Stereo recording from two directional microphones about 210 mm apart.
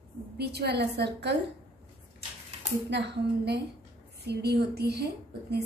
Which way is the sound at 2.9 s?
55° right (ahead or behind).